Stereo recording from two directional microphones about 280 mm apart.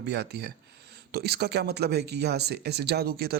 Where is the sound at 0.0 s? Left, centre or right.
Right.